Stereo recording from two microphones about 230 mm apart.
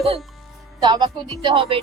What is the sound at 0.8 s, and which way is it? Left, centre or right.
Speech, centre.